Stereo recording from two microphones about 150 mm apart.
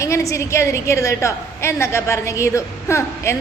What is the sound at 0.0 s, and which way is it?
A woman's voice, 20° left (ahead or behind).